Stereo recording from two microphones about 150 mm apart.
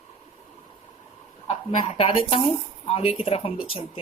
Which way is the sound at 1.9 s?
40° left (ahead or behind).